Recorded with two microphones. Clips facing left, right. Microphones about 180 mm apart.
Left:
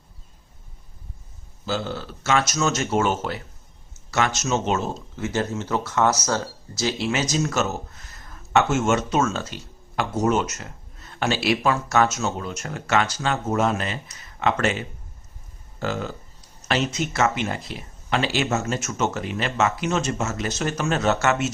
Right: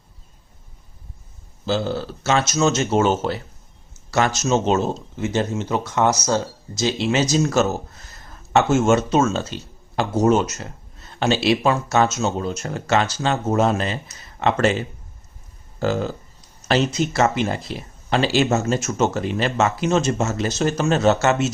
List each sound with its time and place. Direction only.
1.6 s speech: 30° right (ahead or behind)